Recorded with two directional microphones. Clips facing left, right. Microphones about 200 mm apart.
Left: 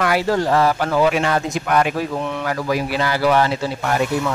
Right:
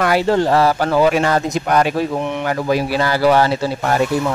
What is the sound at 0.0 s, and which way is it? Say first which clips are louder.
Speech: right 3 dB; 30° right (ahead or behind).